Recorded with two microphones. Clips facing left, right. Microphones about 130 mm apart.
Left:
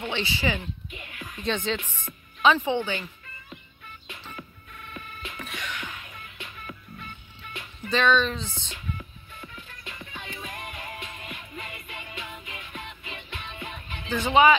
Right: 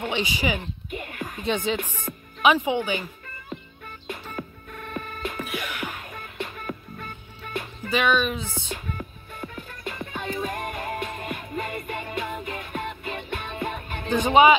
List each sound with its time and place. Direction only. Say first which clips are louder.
0.1 s speech: right 1 dB; 15° right (ahead or behind)
0.6 s music: right 5 dB; 50° right (ahead or behind)
1.4 s speech: right 2 dB; 10° right (ahead or behind)
1.8 s speech: right 8 dB; 40° right (ahead or behind)
2.4 s speech: right 1 dB; 10° right (ahead or behind)
3.4 s music: right 9 dB; 50° right (ahead or behind)
5.4 s music: right 5 dB; 10° right (ahead or behind)
5.8 s music: right 6 dB; 40° right (ahead or behind)
7.9 s speech: even; 10° right (ahead or behind)
8.7 s music: right 3 dB; 50° right (ahead or behind)
14.1 s speech: right 3 dB; 20° right (ahead or behind)